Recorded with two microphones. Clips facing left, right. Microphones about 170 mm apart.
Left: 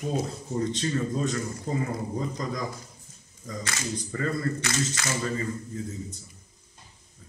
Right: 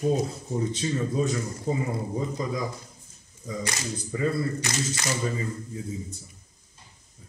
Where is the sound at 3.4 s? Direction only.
20° right (ahead or behind).